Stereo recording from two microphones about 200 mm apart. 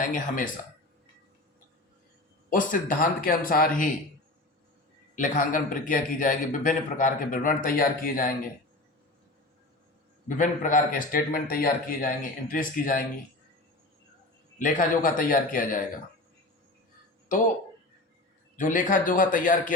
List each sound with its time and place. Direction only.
0.1 s a man's voice: 45° left (ahead or behind)
2.5 s a man's voice: 40° left (ahead or behind)
5.1 s a man's voice: 40° left (ahead or behind)
10.2 s a man's voice: 40° left (ahead or behind)
14.6 s a man's voice: 45° left (ahead or behind)
18.5 s a man's voice: 40° left (ahead or behind)